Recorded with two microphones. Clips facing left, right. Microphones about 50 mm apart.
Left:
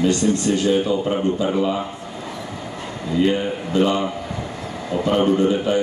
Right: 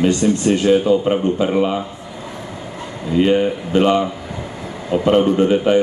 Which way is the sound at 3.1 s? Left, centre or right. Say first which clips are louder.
Right 4 dB; right.